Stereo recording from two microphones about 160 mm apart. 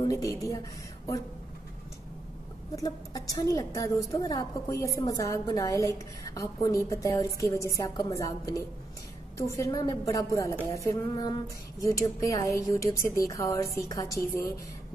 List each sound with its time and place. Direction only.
0.1 s a woman's voice: 20° left (ahead or behind)
2.7 s a woman's voice: 20° left (ahead or behind)